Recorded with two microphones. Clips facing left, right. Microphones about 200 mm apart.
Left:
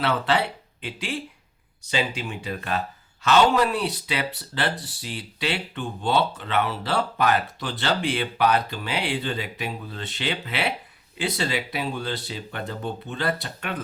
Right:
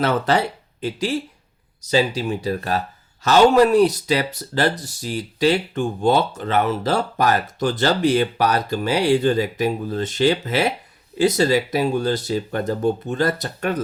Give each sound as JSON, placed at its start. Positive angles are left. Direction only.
{"t": 0.0, "sound": "speech", "side_deg": -45}